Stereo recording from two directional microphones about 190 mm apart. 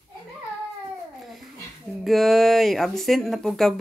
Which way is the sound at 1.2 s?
Centre (ahead or behind).